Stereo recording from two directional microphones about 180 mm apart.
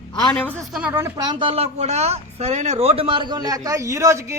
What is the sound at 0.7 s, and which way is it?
A woman's voice, 5° right (ahead or behind).